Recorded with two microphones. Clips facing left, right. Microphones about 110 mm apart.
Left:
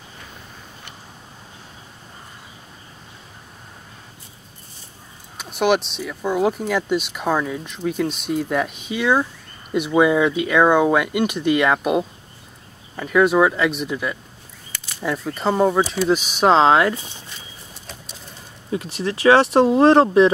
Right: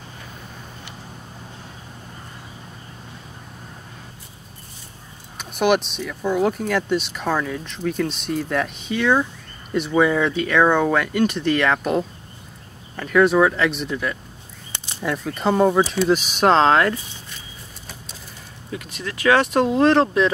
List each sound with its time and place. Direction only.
5.9 s speech: 5° left (ahead or behind)
18.7 s speech: 30° left (ahead or behind)